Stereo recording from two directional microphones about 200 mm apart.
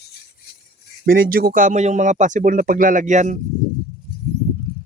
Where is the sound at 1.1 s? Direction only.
45° right (ahead or behind).